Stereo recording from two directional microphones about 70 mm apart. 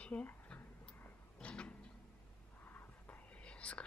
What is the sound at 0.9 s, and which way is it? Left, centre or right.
Vehicle, left.